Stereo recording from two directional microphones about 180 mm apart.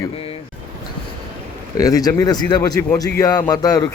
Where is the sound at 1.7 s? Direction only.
20° left (ahead or behind).